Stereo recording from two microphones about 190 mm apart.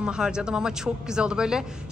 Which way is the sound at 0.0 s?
5° right (ahead or behind).